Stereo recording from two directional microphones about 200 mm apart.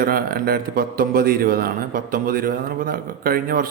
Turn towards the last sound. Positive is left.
turn(degrees=-45)  # may be behind; listen again after turning